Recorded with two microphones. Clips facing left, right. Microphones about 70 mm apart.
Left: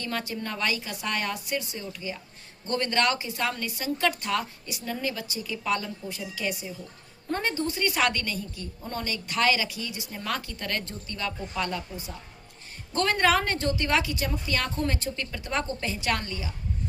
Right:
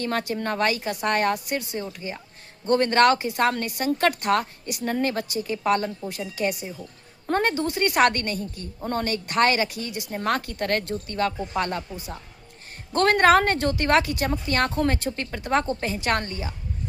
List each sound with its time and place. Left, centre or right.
0.0 s a woman's voice: right
1.8 s a woman's voice: right